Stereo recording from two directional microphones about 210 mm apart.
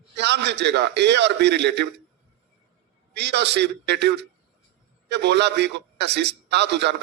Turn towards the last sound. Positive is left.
turn(degrees=-55)  # may be behind; listen again after turning